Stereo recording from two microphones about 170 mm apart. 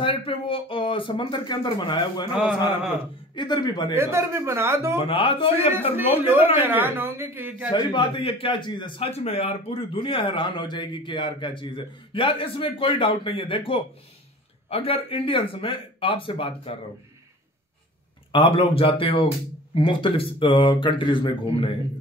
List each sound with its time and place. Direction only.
0.0 s speech: 30° left (ahead or behind)
3.3 s speech: 25° left (ahead or behind)
3.9 s speech: 15° right (ahead or behind)
4.9 s speech: 30° left (ahead or behind)
5.7 s speech: 10° right (ahead or behind)
7.7 s speech: 30° left (ahead or behind)
18.3 s speech: 30° left (ahead or behind)